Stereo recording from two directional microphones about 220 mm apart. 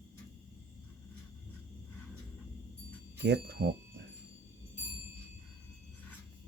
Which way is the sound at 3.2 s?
50° right (ahead or behind).